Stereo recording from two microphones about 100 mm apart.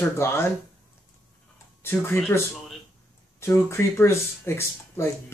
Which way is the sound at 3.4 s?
25° left (ahead or behind).